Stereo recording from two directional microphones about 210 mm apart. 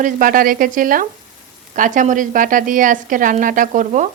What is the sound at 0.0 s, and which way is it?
Speech, 40° right (ahead or behind).